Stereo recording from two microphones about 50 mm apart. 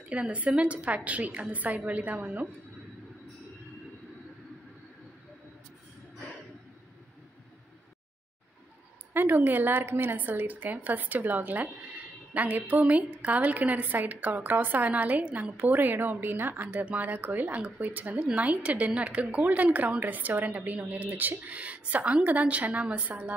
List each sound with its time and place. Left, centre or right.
0.0 s a woman's voice: right
9.1 s a woman's voice: right